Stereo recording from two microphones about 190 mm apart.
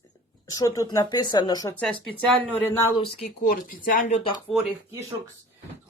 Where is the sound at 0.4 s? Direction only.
20° left (ahead or behind).